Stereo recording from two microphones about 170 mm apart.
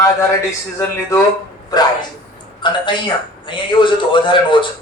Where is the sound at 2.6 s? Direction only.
30° left (ahead or behind).